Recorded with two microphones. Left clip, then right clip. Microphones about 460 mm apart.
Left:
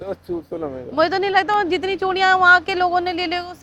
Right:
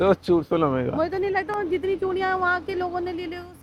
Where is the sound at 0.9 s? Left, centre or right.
Left.